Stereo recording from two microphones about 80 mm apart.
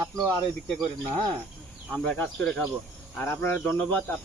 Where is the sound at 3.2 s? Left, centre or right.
Left.